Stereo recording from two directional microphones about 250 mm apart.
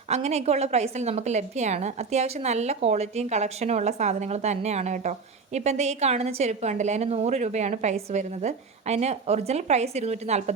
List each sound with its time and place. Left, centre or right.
0.1 s a woman's voice: right